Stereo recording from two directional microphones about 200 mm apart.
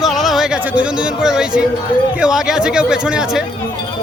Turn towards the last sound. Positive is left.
turn(degrees=-5)  # may be behind; listen again after turning